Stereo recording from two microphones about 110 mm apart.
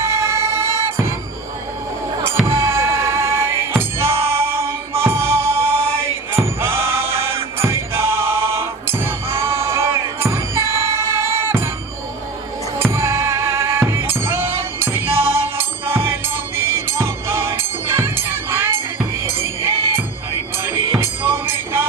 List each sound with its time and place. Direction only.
0.0 s music: 25° right (ahead or behind)
2.5 s music: 25° right (ahead or behind)
12.8 s music: 25° right (ahead or behind)